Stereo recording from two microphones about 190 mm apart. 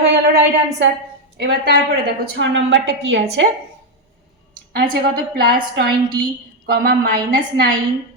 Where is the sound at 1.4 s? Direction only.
60° right (ahead or behind).